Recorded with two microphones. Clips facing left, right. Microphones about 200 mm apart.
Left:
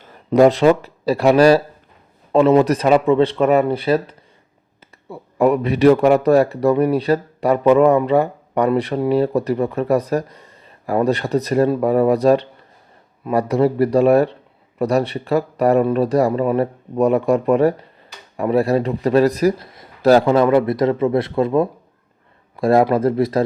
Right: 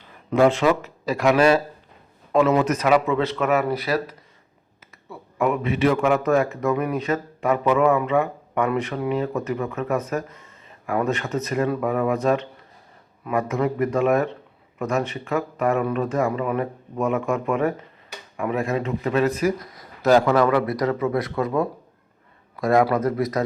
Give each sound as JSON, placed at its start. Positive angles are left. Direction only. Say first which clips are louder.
{"t": 0.3, "sound": "a man's voice", "louder": "left 6 dB", "side_deg": 35}